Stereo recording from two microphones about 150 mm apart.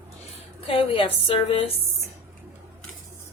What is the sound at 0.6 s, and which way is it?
A woman's voice, 40° left (ahead or behind).